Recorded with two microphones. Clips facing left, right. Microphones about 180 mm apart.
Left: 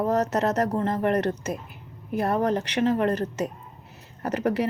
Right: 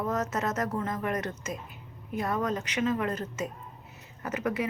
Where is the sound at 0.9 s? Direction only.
65° left (ahead or behind).